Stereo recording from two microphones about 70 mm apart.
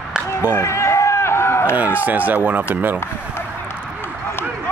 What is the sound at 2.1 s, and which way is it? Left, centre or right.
Speech, right.